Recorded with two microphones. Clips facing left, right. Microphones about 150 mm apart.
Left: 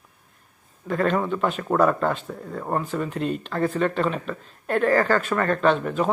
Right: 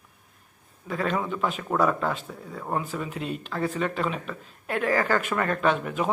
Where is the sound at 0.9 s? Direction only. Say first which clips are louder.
Left 5 dB; 5° right (ahead or behind).